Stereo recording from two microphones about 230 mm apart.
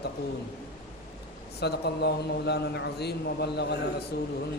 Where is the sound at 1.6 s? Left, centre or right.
Left.